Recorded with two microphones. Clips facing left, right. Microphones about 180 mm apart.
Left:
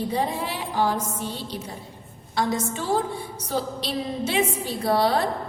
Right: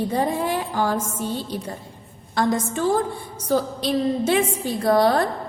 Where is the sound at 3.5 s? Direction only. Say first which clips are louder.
Right 7 dB; 50° right (ahead or behind).